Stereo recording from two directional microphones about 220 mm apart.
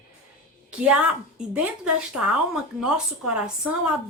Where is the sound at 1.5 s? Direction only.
5° right (ahead or behind).